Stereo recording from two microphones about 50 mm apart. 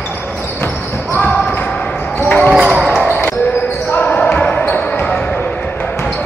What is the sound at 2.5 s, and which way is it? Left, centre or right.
Basketball bounce, centre.